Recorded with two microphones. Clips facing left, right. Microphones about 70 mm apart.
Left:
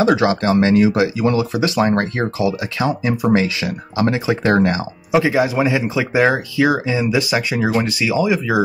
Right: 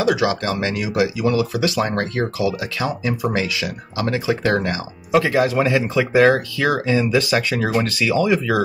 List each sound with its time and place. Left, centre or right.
0.0 s speech: left
5.1 s speech: centre